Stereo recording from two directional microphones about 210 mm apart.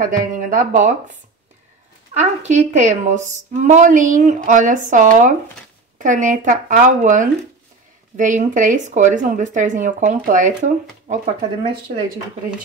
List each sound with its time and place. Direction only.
0.0 s a woman's voice: 40° right (ahead or behind)
2.1 s a woman's voice: 35° right (ahead or behind)